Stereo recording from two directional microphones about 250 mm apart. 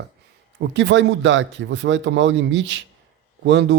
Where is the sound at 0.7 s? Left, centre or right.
Right.